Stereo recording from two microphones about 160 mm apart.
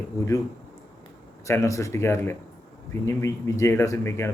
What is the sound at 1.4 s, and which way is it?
A man's voice, 20° left (ahead or behind).